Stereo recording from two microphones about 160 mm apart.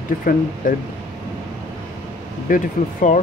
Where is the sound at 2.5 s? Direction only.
60° left (ahead or behind).